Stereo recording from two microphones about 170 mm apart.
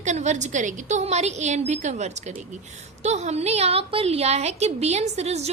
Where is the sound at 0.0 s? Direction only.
45° right (ahead or behind).